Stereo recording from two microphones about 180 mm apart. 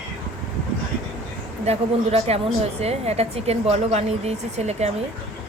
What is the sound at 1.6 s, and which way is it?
A woman's voice, 35° right (ahead or behind).